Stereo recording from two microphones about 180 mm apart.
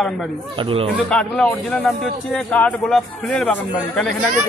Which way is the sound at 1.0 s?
5° left (ahead or behind).